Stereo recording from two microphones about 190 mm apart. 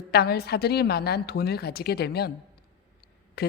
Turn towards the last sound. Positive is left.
turn(degrees=55)  # may be behind; listen again after turning